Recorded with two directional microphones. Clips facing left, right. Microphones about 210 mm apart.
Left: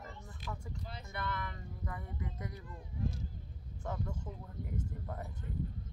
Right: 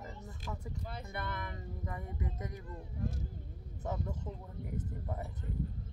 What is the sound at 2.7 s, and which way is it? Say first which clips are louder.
Speech: left 1 dB; 50° right (ahead or behind).